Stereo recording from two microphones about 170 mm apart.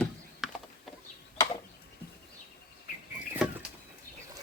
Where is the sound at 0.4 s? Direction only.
Centre (ahead or behind).